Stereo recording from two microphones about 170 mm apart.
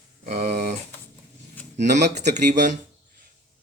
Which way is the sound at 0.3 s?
40° right (ahead or behind).